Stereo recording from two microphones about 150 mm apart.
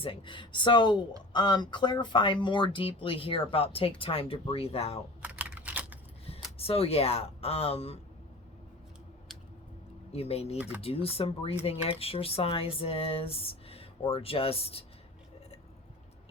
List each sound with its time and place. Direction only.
0.0 s speech: 35° left (ahead or behind)
5.2 s computer keyboard: 10° right (ahead or behind)
6.2 s speech: 40° left (ahead or behind)
10.1 s speech: 45° left (ahead or behind)